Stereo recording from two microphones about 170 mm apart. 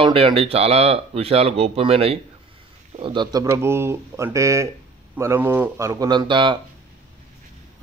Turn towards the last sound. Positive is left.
turn(degrees=-30)  # may be behind; listen again after turning